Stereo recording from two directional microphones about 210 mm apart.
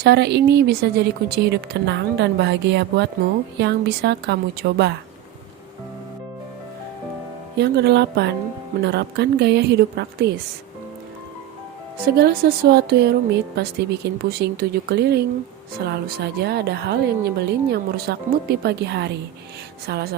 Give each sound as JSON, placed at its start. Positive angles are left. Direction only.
{"t": 0.0, "sound": "a woman's voice", "side_deg": -50}
{"t": 7.6, "sound": "a woman's voice", "side_deg": -55}
{"t": 12.0, "sound": "a woman's voice", "side_deg": -45}